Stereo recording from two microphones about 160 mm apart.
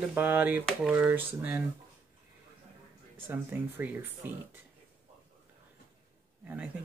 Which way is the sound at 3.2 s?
10° right (ahead or behind).